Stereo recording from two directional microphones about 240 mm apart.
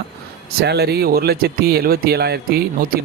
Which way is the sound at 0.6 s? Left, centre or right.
Right.